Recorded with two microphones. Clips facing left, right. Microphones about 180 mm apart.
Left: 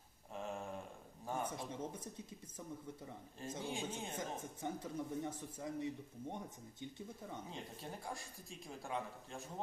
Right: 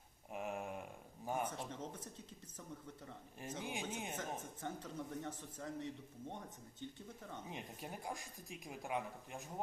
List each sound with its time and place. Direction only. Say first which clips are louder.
0.3 s a sound: right 1 dB; 15° right (ahead or behind)
1.5 s speech: left 2 dB; 10° left (ahead or behind)
3.6 s speech: left 1 dB; 15° right (ahead or behind)
4.2 s speech: left 1 dB; 10° left (ahead or behind)
7.5 s speech: even; 15° right (ahead or behind)